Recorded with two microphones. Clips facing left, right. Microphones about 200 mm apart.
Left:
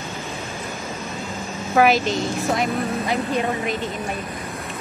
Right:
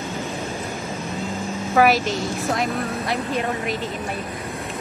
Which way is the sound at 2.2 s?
Centre (ahead or behind).